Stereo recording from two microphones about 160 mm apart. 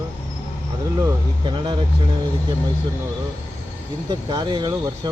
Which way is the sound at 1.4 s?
30° right (ahead or behind).